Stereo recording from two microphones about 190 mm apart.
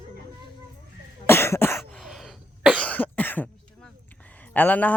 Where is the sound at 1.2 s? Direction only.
15° left (ahead or behind).